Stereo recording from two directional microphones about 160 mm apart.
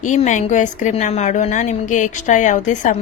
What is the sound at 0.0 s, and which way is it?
A woman's voice, 50° left (ahead or behind).